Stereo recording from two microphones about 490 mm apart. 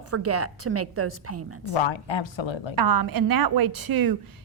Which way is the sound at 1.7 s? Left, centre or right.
Left.